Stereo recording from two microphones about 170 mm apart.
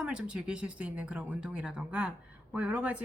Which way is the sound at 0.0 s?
5° right (ahead or behind).